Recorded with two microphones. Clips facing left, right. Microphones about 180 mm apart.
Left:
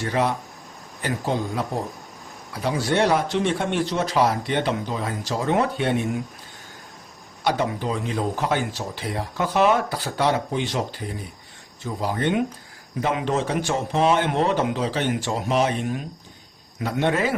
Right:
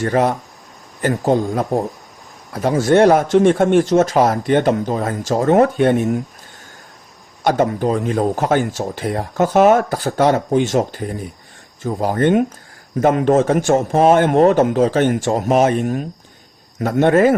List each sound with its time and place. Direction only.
0.0 s speech: 45° right (ahead or behind)
7.4 s speech: 45° right (ahead or behind)